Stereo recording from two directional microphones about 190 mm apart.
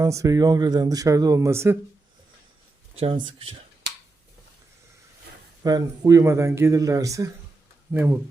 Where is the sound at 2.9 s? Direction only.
30° right (ahead or behind).